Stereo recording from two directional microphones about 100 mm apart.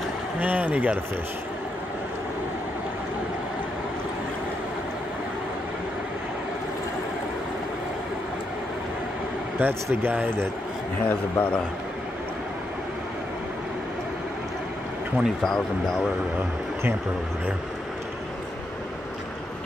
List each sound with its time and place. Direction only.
0.4 s speech: 15° right (ahead or behind)
9.6 s speech: 20° right (ahead or behind)
11.1 s a man's voice: 20° left (ahead or behind)
15.1 s speech: 5° left (ahead or behind)